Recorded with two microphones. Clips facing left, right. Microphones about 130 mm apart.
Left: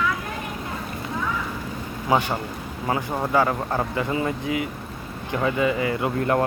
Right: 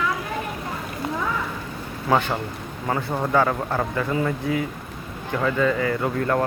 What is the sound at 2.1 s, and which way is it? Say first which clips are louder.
Speech: right 1 dB; 15° left (ahead or behind).